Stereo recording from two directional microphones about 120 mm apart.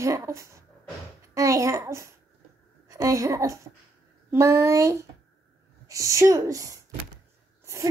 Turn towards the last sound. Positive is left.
turn(degrees=-25)  # may be behind; listen again after turning